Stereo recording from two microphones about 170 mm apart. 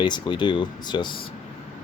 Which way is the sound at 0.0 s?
25° left (ahead or behind).